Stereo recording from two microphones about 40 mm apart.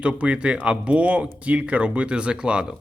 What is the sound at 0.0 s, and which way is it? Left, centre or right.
Speech, right.